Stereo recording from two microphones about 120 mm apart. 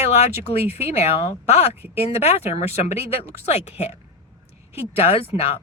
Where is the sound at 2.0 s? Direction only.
60° left (ahead or behind).